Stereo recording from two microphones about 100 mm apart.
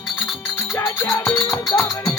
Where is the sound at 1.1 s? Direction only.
30° left (ahead or behind).